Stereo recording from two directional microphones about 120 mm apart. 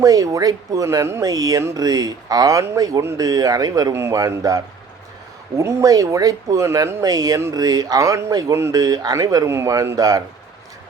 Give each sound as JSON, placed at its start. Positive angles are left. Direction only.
{"t": 0.0, "sound": "speech", "side_deg": -30}